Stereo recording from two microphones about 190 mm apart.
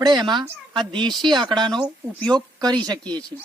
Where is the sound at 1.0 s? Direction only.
Centre (ahead or behind).